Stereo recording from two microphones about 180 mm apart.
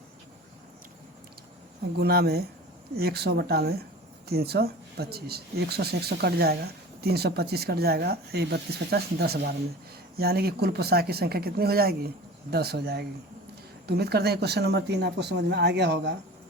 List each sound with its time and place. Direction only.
2.0 s speech: 60° right (ahead or behind)